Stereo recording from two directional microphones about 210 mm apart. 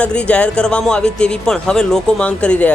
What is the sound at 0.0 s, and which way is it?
A man's voice, 5° left (ahead or behind).